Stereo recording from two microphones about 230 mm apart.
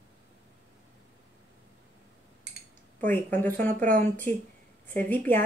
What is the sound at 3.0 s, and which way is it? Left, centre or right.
Speech, centre.